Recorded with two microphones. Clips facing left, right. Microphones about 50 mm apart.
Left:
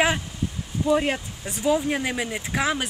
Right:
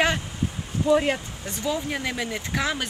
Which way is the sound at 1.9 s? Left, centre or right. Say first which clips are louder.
Left 2 dB; centre.